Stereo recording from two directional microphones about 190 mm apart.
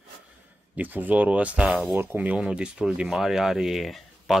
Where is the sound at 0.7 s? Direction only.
10° right (ahead or behind).